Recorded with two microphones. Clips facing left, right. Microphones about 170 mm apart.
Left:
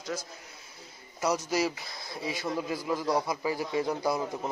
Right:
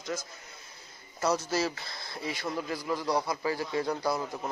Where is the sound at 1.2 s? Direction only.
10° left (ahead or behind).